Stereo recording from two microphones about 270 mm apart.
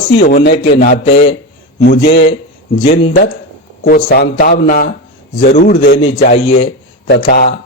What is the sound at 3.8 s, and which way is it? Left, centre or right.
A man's voice, left.